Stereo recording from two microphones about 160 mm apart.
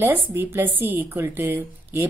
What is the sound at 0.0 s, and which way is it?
A woman's voice, 15° right (ahead or behind).